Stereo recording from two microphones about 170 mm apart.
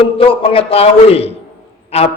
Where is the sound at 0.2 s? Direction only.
35° left (ahead or behind).